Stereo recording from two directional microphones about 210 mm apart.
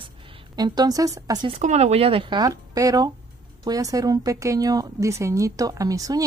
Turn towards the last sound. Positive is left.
turn(degrees=-15)  # may be behind; listen again after turning